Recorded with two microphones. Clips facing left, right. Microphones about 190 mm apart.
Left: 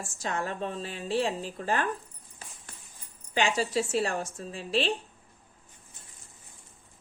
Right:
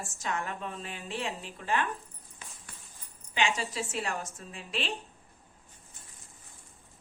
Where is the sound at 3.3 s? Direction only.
40° left (ahead or behind).